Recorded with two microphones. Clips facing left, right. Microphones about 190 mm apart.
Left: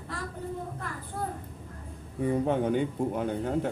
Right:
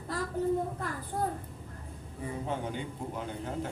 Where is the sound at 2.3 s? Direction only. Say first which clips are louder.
Left 9 dB; 60° left (ahead or behind).